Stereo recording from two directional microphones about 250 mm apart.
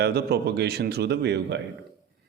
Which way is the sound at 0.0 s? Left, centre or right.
Right.